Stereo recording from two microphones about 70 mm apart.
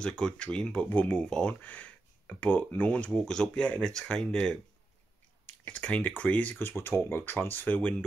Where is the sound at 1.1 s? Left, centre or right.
Centre.